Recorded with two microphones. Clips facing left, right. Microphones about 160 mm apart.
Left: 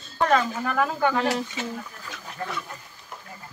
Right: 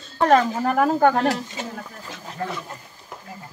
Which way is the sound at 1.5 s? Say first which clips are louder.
Even; 30° right (ahead or behind).